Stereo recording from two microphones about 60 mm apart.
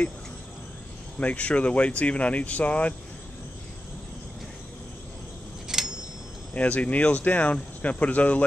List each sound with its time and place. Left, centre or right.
1.2 s speech: left
5.7 s a sound: centre
6.5 s speech: left